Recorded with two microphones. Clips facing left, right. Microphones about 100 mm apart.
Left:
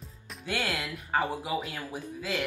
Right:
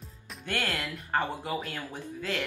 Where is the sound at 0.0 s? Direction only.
Centre (ahead or behind).